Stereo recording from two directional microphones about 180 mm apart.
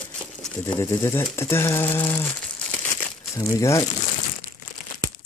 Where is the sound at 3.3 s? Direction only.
20° left (ahead or behind).